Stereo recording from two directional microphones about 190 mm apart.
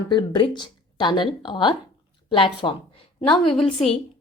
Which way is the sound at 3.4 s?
Centre (ahead or behind).